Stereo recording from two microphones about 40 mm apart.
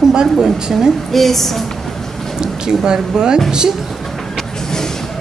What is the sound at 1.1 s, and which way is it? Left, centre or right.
Speech, centre.